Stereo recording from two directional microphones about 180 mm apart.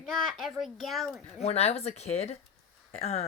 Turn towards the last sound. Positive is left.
turn(degrees=35)  # may be behind; listen again after turning